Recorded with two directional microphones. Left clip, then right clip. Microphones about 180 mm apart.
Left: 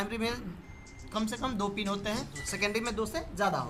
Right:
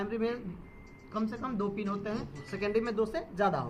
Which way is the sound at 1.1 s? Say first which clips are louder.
Left 2 dB; 35° left (ahead or behind).